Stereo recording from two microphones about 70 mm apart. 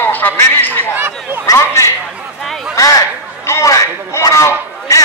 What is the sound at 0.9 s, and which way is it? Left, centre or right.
Speech, right.